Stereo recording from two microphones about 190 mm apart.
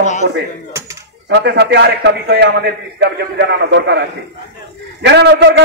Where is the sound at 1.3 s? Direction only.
60° right (ahead or behind).